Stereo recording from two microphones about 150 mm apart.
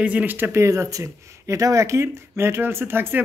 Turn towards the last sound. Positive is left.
turn(degrees=-15)  # may be behind; listen again after turning